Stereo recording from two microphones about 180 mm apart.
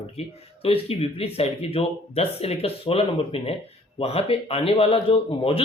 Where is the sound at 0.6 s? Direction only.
35° left (ahead or behind).